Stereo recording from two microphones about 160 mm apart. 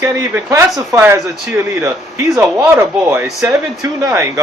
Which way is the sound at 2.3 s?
20° right (ahead or behind).